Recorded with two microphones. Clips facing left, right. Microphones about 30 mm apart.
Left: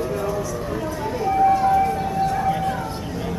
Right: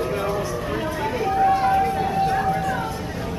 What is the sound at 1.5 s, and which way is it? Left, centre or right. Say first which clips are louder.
Vehicle: left 1 dB; right.